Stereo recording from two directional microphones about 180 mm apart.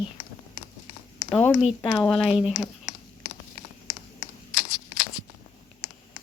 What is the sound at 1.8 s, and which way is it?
Speech, 20° left (ahead or behind).